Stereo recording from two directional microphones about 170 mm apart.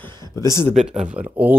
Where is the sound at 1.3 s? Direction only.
10° right (ahead or behind).